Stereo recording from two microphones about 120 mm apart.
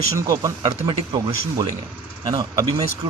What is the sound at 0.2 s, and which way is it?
A man's voice, 30° right (ahead or behind).